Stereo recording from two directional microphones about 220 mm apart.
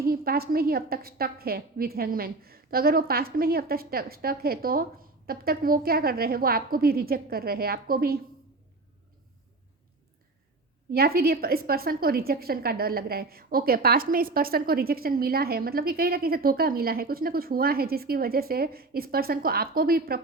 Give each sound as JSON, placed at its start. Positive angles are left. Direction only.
{"t": 0.0, "sound": "a woman's voice", "side_deg": -45}
{"t": 10.9, "sound": "a woman's voice", "side_deg": -45}